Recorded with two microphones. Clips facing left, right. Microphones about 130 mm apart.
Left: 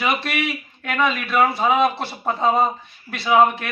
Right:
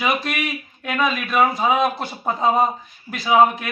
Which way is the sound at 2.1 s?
Centre (ahead or behind).